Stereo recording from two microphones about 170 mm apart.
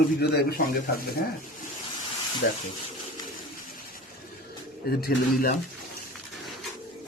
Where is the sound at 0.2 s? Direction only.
65° left (ahead or behind).